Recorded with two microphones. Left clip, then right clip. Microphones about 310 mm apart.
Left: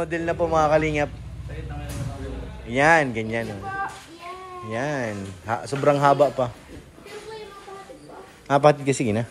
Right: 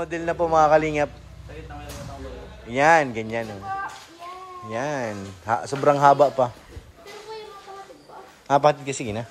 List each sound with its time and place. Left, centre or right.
0.0 s a man's voice: centre
2.7 s a man's voice: centre
4.6 s a man's voice: centre
8.5 s a man's voice: centre